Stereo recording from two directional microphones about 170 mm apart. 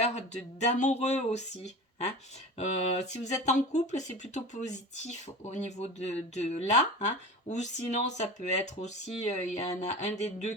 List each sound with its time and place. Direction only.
0.7 s speech: 40° left (ahead or behind)
2.6 s speech: 40° left (ahead or behind)